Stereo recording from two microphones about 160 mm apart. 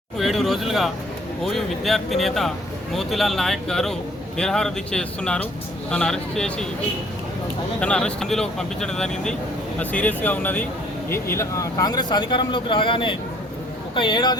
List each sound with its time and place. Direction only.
0.2 s speech: centre (ahead or behind)
7.8 s speech: 5° left (ahead or behind); by 14.3 s 30° left (ahead or behind)